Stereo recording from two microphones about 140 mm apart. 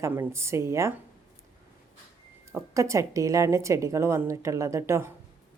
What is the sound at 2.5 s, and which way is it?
Speech, 20° right (ahead or behind).